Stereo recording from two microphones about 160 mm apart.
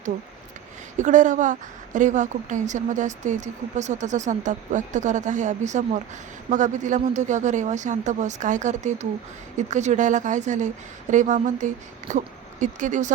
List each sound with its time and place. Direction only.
0.9 s a woman's voice: 55° right (ahead or behind)